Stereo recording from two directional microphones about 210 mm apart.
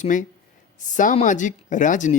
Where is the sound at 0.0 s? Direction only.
35° left (ahead or behind).